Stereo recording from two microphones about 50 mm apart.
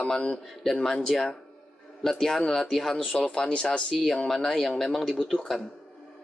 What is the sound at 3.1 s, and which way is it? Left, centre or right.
Speech, centre.